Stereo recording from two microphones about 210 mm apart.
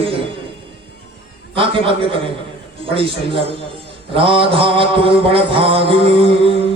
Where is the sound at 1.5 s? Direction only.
25° right (ahead or behind).